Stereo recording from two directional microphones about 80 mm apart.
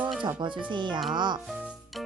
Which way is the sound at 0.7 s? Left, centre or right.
Right.